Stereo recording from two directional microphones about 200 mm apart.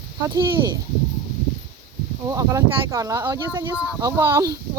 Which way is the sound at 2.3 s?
15° right (ahead or behind).